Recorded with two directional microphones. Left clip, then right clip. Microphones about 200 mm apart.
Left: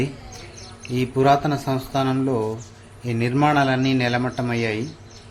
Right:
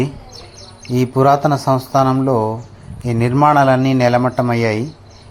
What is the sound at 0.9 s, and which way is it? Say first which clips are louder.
A man's voice: right 5 dB; 30° right (ahead or behind).